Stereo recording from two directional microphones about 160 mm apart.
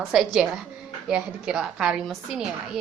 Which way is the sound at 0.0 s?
Centre (ahead or behind).